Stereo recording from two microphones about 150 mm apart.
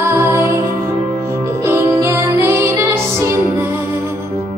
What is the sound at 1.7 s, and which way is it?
Music, 20° right (ahead or behind).